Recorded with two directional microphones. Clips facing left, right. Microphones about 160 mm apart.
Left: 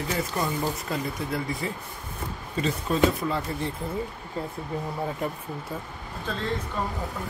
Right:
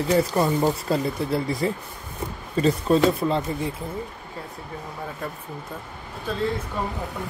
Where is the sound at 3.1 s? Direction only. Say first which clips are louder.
Right 5 dB; 25° right (ahead or behind).